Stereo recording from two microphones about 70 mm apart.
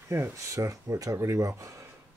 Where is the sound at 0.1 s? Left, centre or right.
Right.